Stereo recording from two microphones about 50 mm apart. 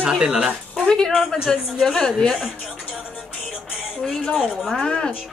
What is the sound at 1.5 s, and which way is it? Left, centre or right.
Speech, centre.